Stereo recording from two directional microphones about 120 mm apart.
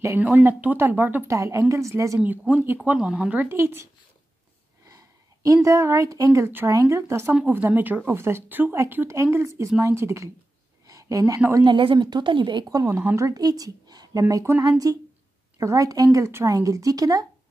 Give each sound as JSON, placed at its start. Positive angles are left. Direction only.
{"t": 0.0, "sound": "speech", "side_deg": -15}
{"t": 1.3, "sound": "a woman's voice", "side_deg": -25}
{"t": 2.1, "sound": "a woman's voice", "side_deg": -15}
{"t": 11.6, "sound": "a woman's voice", "side_deg": -40}
{"t": 12.6, "sound": "a woman's voice", "side_deg": -30}
{"t": 14.3, "sound": "a woman's voice", "side_deg": -20}
{"t": 14.6, "sound": "a woman's voice", "side_deg": -35}